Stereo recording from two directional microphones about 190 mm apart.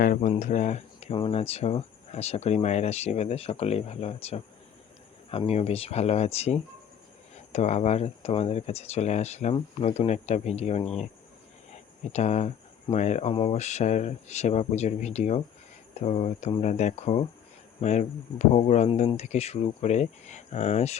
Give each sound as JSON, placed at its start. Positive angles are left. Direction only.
{"t": 0.0, "sound": "speech", "side_deg": 45}
{"t": 11.7, "sound": "a sound", "side_deg": 35}
{"t": 12.9, "sound": "speech", "side_deg": 35}